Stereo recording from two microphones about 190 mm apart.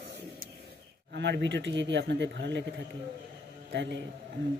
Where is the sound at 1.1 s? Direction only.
65° right (ahead or behind).